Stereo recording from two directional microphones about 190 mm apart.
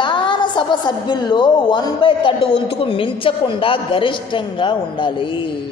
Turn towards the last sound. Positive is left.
turn(degrees=25)  # may be behind; listen again after turning